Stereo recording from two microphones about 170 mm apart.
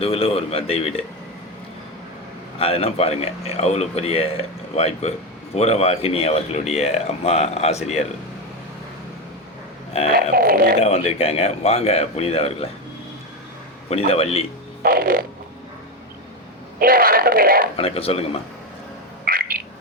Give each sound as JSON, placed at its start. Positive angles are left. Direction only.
{"t": 0.0, "sound": "speech", "side_deg": 35}
{"t": 2.6, "sound": "speech", "side_deg": 35}
{"t": 10.1, "sound": "speech", "side_deg": -60}
{"t": 10.8, "sound": "speech", "side_deg": 40}
{"t": 13.9, "sound": "speech", "side_deg": 35}
{"t": 14.8, "sound": "speech", "side_deg": -60}
{"t": 16.8, "sound": "speech", "side_deg": -60}
{"t": 17.7, "sound": "speech", "side_deg": 35}
{"t": 19.2, "sound": "a sound", "side_deg": -60}